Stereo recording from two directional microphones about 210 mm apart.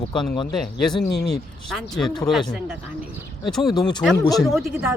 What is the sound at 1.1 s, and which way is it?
Speech, 50° left (ahead or behind).